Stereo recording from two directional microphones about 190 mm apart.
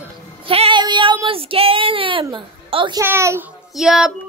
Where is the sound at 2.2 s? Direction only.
25° right (ahead or behind).